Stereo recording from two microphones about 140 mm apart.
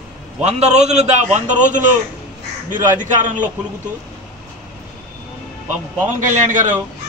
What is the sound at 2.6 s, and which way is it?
Speech, 70° right (ahead or behind).